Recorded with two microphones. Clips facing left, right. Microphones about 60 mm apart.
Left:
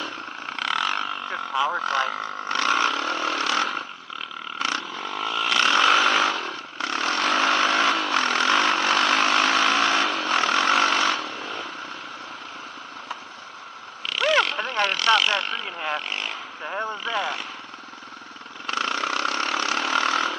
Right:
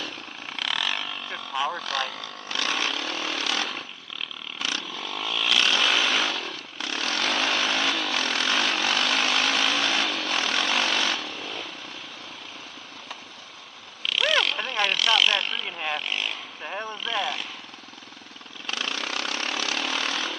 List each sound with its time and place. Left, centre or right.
0.5 s a sound: left
4.6 s vehicle: left
14.2 s vehicle: left
16.8 s vehicle: left
18.7 s vehicle: left